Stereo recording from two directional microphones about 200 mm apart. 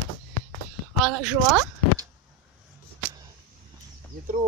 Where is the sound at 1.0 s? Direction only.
5° right (ahead or behind).